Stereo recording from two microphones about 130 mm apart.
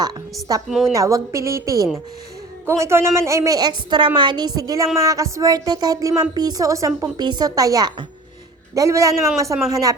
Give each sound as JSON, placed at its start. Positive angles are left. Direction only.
{"t": 0.7, "sound": "a woman's voice", "side_deg": 0}
{"t": 0.9, "sound": "a woman's voice", "side_deg": -25}